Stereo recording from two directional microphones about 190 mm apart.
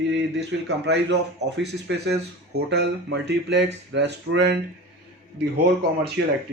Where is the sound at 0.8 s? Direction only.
65° right (ahead or behind).